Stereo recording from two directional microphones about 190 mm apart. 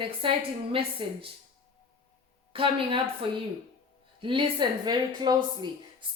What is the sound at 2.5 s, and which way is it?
A woman's voice, 30° right (ahead or behind).